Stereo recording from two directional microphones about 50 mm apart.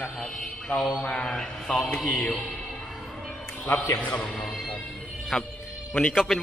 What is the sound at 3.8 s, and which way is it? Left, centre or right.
Speech, left.